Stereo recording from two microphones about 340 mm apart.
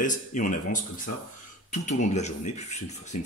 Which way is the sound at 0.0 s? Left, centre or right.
Left.